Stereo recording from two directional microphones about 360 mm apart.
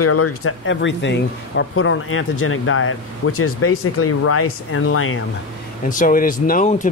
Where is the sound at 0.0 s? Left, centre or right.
Left.